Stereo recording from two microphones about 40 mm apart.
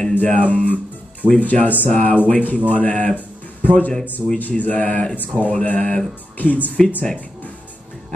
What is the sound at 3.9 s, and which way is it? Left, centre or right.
Speech, centre.